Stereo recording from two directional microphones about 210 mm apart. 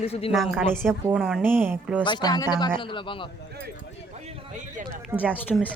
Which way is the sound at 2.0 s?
20° left (ahead or behind).